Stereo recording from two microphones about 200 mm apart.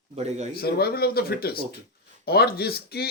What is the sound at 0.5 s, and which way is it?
A man's voice, 50° left (ahead or behind).